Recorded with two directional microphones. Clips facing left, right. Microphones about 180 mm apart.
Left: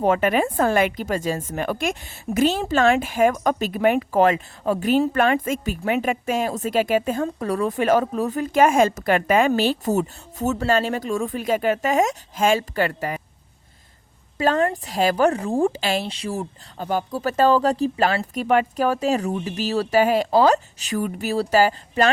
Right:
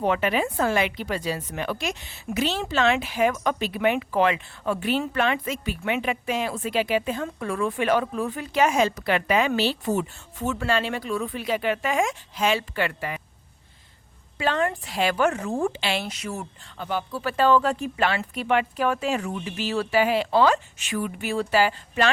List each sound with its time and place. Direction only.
0.0 s a woman's voice: 45° left (ahead or behind)
14.3 s speech: 40° left (ahead or behind)